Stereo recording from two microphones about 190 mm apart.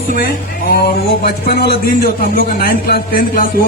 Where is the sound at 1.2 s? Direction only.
55° left (ahead or behind).